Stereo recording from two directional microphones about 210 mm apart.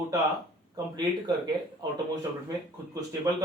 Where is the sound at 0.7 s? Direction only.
20° right (ahead or behind).